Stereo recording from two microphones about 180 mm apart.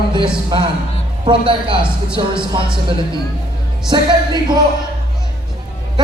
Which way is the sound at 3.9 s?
25° right (ahead or behind).